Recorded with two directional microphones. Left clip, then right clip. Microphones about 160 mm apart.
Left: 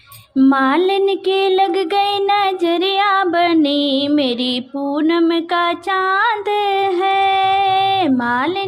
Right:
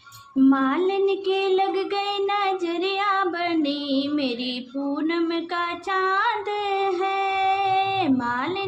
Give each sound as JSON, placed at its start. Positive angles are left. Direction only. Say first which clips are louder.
{"t": 0.3, "sound": "music", "louder": "left 7 dB", "side_deg": 50}
{"t": 3.0, "sound": "female singing", "louder": "left 8 dB", "side_deg": 50}
{"t": 6.1, "sound": "music", "louder": "left 7 dB", "side_deg": 45}